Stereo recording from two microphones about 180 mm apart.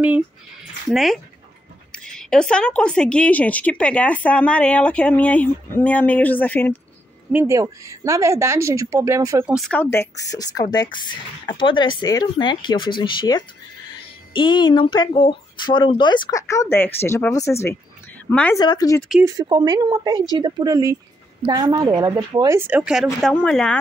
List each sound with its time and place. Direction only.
0.8 s a woman's voice: centre (ahead or behind)
7.3 s speech: 15° right (ahead or behind)
9.5 s speech: centre (ahead or behind)
9.8 s a woman's voice: 15° left (ahead or behind)
18.6 s speech: 20° left (ahead or behind)
19.2 s speech: 25° right (ahead or behind); by 23.0 s 5° right (ahead or behind)
23.2 s speech: 5° left (ahead or behind)